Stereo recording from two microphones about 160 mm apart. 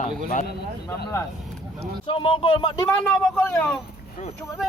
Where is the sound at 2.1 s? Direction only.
35° left (ahead or behind).